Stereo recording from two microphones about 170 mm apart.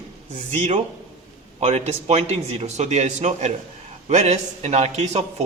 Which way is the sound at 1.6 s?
40° right (ahead or behind).